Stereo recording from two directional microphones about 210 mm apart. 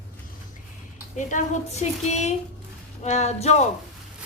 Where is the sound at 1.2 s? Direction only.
35° left (ahead or behind).